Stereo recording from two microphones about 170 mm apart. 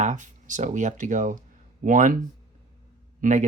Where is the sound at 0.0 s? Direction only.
45° right (ahead or behind).